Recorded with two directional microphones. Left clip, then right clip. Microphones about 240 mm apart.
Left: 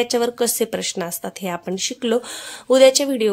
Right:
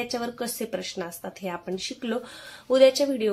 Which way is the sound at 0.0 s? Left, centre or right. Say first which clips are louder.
Left 11 dB; left.